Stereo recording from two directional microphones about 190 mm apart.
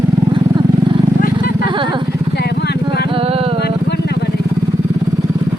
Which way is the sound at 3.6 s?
60° left (ahead or behind).